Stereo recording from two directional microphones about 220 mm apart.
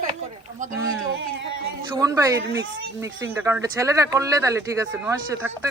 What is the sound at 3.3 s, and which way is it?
Speech, 10° right (ahead or behind).